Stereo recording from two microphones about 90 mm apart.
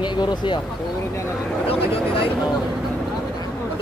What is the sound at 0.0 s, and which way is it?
Speech, 55° left (ahead or behind).